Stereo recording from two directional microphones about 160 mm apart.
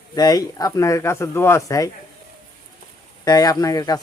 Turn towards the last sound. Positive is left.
turn(degrees=20)  # may be behind; listen again after turning